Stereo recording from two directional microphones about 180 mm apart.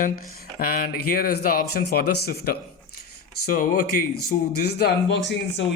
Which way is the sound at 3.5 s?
50° left (ahead or behind).